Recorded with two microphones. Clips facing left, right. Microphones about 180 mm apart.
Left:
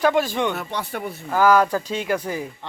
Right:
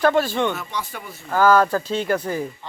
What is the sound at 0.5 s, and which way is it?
Speech, 60° left (ahead or behind).